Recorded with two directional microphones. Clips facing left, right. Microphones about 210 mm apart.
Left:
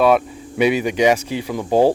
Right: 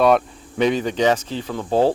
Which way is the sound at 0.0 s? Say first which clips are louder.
Left 1 dB; 5° left (ahead or behind).